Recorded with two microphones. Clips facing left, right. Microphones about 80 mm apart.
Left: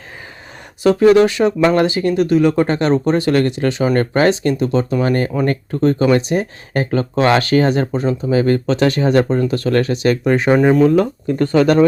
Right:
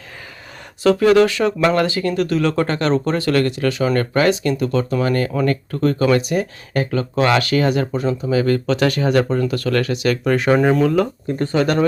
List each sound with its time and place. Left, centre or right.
0.8 s speech: left
11.3 s speech: left